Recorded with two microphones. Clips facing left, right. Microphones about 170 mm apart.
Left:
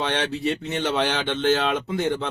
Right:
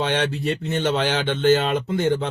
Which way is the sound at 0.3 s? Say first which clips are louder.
Right 1 dB; centre (ahead or behind).